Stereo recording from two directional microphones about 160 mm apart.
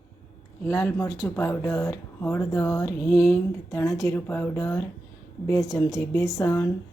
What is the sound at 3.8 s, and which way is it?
Speech, 20° left (ahead or behind).